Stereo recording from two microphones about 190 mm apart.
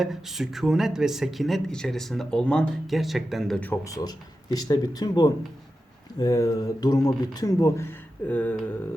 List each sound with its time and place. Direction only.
0.0 s speech: centre (ahead or behind)